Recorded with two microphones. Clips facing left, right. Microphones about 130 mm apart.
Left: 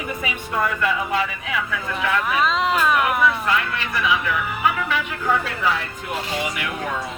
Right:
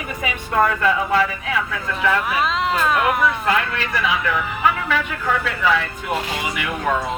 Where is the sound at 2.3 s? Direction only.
Centre (ahead or behind).